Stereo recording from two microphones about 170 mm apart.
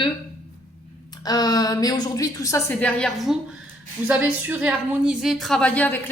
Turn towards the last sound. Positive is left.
turn(degrees=10)  # may be behind; listen again after turning